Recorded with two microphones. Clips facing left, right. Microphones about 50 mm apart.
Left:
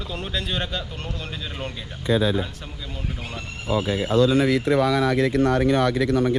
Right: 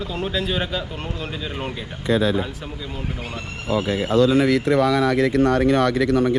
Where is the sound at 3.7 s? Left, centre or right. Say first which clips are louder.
Right 2 dB; right.